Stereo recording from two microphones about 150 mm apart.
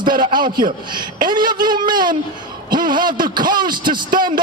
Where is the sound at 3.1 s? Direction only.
30° right (ahead or behind).